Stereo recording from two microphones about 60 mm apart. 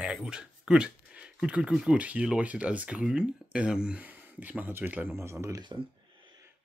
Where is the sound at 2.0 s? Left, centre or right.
Right.